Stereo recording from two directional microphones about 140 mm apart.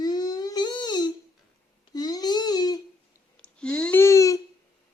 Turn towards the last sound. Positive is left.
turn(degrees=25)  # may be behind; listen again after turning